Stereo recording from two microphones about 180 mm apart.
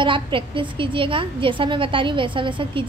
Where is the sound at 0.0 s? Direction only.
30° right (ahead or behind).